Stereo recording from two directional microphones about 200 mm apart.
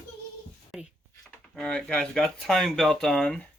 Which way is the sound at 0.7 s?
Centre (ahead or behind).